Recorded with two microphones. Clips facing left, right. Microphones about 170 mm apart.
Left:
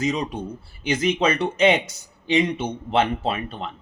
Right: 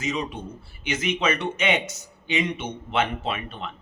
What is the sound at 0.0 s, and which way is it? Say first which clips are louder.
Speech: left 4 dB; 35° left (ahead or behind).